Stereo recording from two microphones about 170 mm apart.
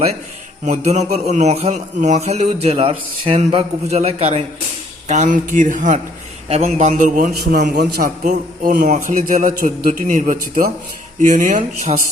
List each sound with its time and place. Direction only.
0.6 s a man's voice: 40° right (ahead or behind)